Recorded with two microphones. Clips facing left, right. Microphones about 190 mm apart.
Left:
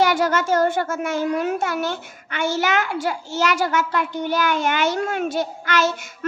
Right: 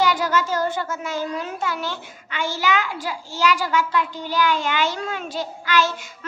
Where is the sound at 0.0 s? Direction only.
50° left (ahead or behind).